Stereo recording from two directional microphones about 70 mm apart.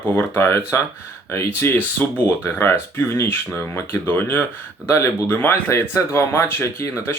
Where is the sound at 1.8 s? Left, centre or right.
Left.